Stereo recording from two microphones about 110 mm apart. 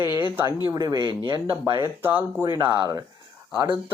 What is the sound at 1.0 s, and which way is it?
Speech, 45° right (ahead or behind).